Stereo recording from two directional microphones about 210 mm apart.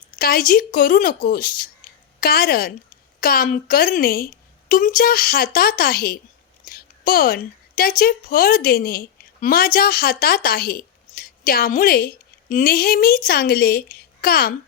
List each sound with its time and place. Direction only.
0.2 s a woman's voice: 45° left (ahead or behind)